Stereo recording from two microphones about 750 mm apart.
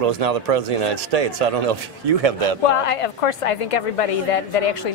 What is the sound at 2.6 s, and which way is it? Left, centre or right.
A woman's voice, left.